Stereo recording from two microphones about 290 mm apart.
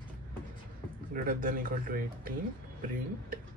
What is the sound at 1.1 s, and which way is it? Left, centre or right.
Speech, right.